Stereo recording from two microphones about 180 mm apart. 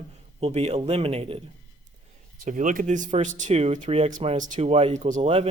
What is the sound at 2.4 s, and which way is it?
Speech, 45° right (ahead or behind).